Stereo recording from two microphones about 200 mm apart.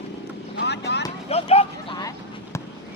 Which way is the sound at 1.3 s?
30° left (ahead or behind).